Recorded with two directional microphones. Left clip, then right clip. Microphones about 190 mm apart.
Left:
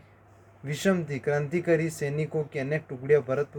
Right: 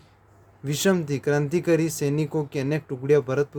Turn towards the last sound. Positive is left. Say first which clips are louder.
# right 3 dB
turn(degrees=-55)  # may be behind; listen again after turning